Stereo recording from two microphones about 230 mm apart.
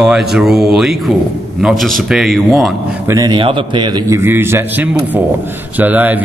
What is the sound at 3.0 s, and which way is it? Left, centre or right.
A man's voice, centre.